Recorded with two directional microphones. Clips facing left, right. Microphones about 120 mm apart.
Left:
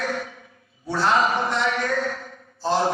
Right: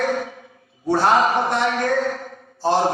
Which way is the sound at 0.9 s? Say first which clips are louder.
Right 4 dB; 50° right (ahead or behind).